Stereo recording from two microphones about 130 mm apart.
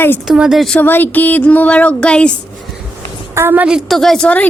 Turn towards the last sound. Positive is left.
turn(degrees=10)  # may be behind; listen again after turning